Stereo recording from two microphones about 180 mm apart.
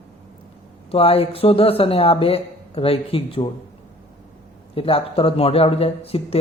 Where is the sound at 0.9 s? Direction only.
35° left (ahead or behind).